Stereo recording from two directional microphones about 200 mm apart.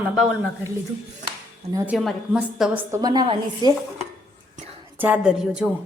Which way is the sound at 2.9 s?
20° right (ahead or behind).